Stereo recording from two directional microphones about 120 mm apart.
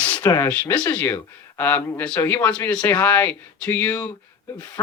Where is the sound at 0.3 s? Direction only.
15° left (ahead or behind).